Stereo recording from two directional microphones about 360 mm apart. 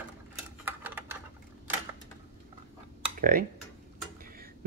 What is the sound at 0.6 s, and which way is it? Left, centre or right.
Typewriter, centre.